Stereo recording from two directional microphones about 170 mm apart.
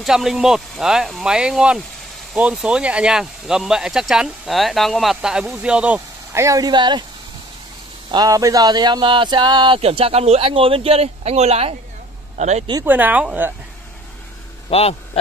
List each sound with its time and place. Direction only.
0.0 s speech: centre (ahead or behind); by 7.1 s 25° right (ahead or behind)
8.1 s speech: 20° right (ahead or behind); by 12.6 s 40° right (ahead or behind)
12.8 s speech: 10° right (ahead or behind)
14.7 s speech: 35° left (ahead or behind)